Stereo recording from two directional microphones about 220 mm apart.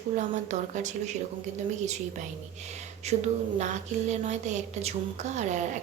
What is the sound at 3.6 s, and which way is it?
A woman's voice, 30° right (ahead or behind).